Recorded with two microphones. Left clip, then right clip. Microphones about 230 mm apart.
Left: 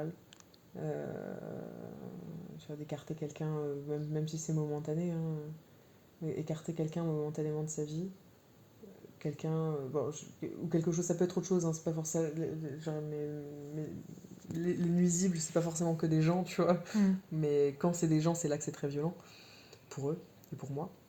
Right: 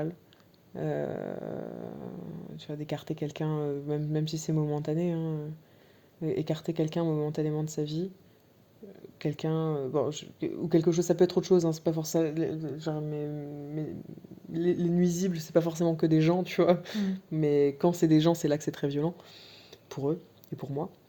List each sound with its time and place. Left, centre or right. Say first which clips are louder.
0.8 s speech: right 7 dB; right
9.1 s speech: right 7 dB; right
14.5 s speech: right 7 dB; right